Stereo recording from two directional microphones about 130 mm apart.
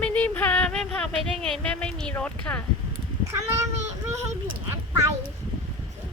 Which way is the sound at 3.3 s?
25° right (ahead or behind).